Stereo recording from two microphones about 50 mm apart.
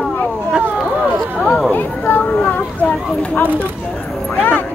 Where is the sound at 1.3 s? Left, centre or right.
Left.